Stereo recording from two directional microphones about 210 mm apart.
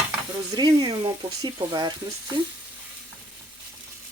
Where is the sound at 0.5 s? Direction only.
20° right (ahead or behind).